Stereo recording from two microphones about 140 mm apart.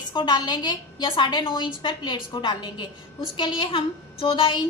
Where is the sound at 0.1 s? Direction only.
30° left (ahead or behind).